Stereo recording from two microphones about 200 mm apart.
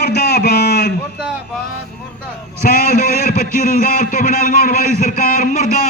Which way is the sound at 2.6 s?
50° left (ahead or behind).